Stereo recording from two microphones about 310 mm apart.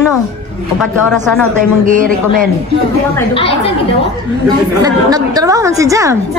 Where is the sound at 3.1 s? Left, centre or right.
Centre.